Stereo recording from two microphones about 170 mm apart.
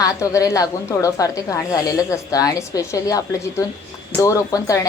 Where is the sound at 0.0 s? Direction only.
20° left (ahead or behind).